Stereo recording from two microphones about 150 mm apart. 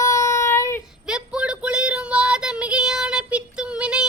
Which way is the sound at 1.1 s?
5° right (ahead or behind).